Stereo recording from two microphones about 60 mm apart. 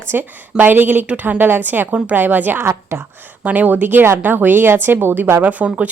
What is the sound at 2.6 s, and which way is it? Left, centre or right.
Speech, right.